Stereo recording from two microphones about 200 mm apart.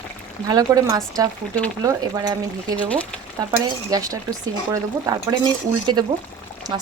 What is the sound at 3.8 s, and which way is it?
Speech, 15° right (ahead or behind).